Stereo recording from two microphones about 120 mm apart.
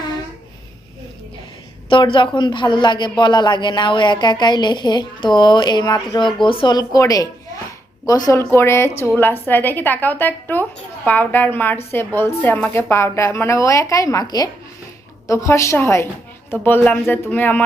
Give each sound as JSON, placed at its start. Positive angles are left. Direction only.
{"t": 1.9, "sound": "a man's voice", "side_deg": 45}